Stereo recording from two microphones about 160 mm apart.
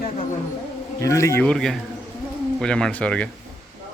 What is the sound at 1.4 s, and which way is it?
Speech, centre (ahead or behind).